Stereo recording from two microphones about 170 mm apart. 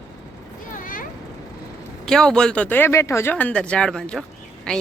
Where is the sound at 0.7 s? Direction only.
55° left (ahead or behind).